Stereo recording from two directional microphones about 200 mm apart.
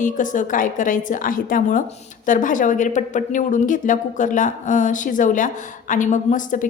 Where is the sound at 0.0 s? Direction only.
40° left (ahead or behind).